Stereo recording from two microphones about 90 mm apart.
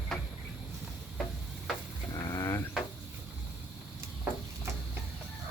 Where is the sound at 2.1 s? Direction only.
45° left (ahead or behind).